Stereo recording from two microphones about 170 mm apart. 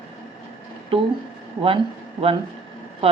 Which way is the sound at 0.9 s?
30° right (ahead or behind).